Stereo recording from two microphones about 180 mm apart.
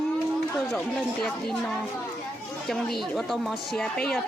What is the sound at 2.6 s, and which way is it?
A child's voice, centre (ahead or behind).